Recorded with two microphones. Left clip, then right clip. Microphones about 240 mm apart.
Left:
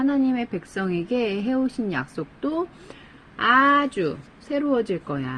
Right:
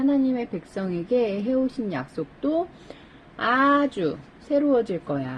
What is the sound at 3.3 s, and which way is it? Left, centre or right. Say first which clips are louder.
Speech: left 3 dB; left.